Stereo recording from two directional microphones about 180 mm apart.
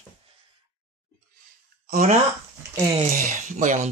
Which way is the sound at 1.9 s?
50° right (ahead or behind).